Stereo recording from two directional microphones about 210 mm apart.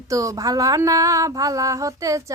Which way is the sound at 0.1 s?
15° right (ahead or behind).